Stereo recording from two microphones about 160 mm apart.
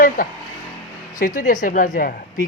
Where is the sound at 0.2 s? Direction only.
60° left (ahead or behind).